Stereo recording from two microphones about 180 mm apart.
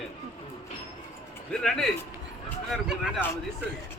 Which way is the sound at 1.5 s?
Centre (ahead or behind).